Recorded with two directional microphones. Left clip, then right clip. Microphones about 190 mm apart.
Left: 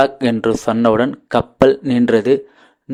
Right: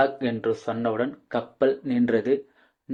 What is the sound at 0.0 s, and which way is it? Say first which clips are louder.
Speech: left 8 dB; 35° left (ahead or behind).